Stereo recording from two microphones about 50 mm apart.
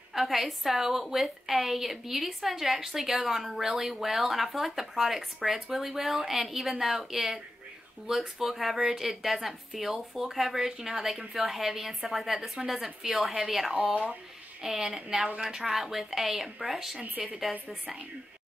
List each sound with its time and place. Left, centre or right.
0.1 s a woman's voice: centre
13.7 s speech: right
14.6 s a woman's voice: centre